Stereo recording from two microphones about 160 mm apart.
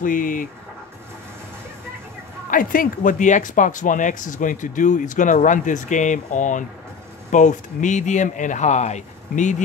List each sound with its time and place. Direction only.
0.0 s speech: 55° left (ahead or behind)
2.5 s speech: 60° left (ahead or behind)